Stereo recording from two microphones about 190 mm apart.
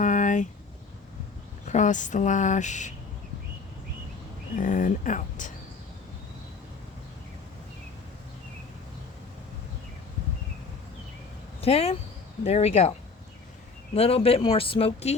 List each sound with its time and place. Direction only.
0.0 s a sound: 40° left (ahead or behind)
1.6 s speech: 40° left (ahead or behind)
4.5 s speech: 40° left (ahead or behind)
11.6 s speech: 30° left (ahead or behind)
13.9 s speech: 30° left (ahead or behind)